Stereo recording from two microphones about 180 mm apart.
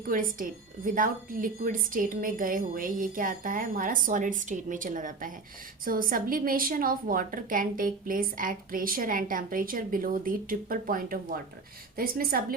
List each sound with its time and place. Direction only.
0.1 s a woman's voice: 50° right (ahead or behind)